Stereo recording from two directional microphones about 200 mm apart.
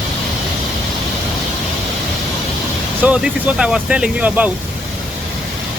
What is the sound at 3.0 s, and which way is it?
Speech, 5° right (ahead or behind).